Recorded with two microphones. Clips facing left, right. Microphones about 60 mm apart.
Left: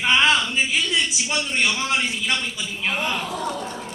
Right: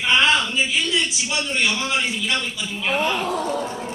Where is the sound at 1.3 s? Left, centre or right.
Left.